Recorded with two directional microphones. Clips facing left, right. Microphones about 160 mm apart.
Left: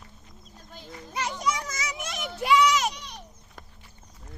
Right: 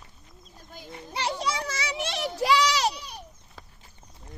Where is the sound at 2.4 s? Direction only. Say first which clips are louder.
Left 2 dB; 35° right (ahead or behind).